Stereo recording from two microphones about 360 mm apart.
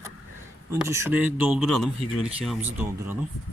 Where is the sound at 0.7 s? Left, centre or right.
Centre.